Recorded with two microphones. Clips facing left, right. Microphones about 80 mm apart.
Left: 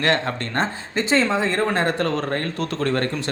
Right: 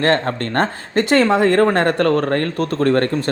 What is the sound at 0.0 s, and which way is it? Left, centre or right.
Speech, right.